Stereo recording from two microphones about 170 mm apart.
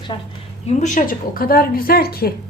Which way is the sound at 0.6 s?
45° left (ahead or behind).